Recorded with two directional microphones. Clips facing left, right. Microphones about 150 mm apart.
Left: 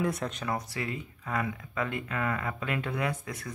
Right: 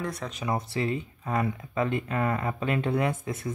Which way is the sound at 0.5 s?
25° right (ahead or behind).